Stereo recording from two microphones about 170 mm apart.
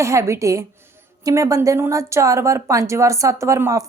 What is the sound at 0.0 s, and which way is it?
A woman's voice, 15° right (ahead or behind).